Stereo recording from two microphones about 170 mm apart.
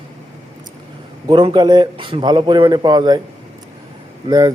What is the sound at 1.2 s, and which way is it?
Speech, 25° right (ahead or behind).